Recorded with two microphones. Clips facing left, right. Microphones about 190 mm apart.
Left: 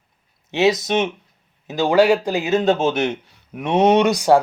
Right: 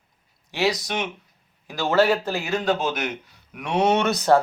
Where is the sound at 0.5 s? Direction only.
20° left (ahead or behind).